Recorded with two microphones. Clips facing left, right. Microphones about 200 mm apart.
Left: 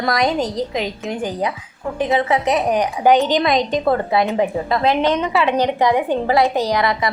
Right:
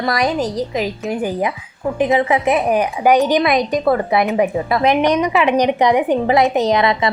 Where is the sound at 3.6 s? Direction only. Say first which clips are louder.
Right 2 dB; 20° left (ahead or behind).